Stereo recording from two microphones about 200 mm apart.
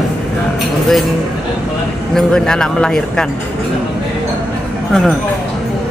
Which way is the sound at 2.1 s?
Centre (ahead or behind).